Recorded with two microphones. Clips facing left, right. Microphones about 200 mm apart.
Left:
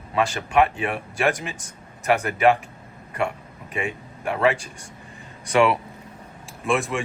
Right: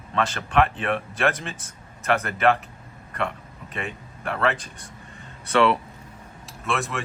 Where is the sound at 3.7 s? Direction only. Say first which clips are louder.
Left 5 dB; 15° left (ahead or behind).